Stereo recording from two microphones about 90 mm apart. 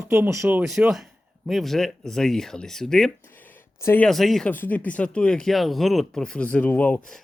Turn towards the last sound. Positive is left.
turn(degrees=20)  # may be behind; listen again after turning